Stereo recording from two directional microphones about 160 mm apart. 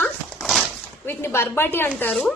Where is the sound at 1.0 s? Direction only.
15° left (ahead or behind).